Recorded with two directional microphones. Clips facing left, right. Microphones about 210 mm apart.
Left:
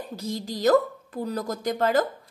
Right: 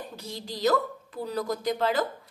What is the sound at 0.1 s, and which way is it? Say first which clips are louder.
A woman's voice: left 6 dB; 40° left (ahead or behind).